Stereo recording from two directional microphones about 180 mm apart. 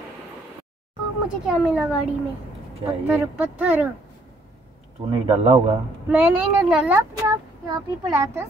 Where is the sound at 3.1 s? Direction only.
5° right (ahead or behind).